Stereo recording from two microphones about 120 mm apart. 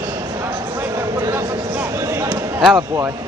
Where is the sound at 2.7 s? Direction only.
25° right (ahead or behind).